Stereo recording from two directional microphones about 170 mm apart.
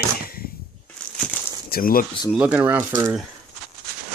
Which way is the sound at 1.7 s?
60° left (ahead or behind).